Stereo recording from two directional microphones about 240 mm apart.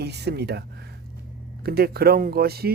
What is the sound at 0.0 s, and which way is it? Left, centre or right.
Speech, right.